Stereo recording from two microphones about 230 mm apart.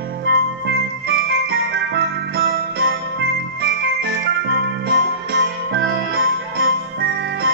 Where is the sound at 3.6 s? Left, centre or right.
Right.